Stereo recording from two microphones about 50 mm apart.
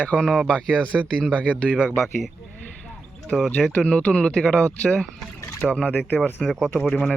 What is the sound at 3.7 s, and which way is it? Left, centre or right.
Speech, left.